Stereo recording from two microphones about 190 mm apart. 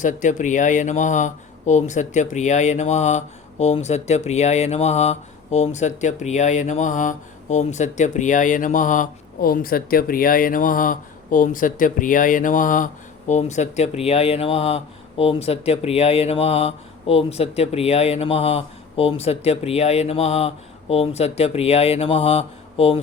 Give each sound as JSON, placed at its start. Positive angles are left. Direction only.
{"t": 0.0, "sound": "speech", "side_deg": 40}